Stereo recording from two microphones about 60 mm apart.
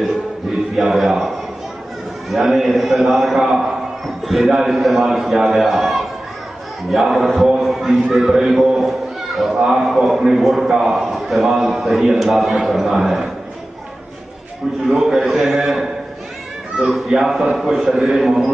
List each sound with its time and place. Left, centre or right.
0.7 s a man's voice: centre
14.9 s a man's voice: centre